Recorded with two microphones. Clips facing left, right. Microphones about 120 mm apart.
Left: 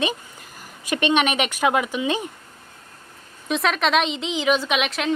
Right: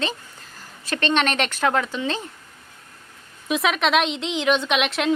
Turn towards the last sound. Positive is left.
turn(degrees=0)  # may be behind; listen again after turning